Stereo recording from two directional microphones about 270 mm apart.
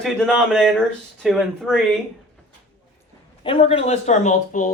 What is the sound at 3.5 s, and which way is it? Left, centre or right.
Speech, left.